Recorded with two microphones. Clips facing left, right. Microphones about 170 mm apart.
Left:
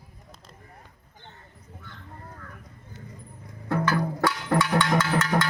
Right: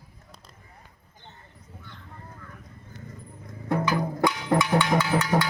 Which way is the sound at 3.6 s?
15° right (ahead or behind).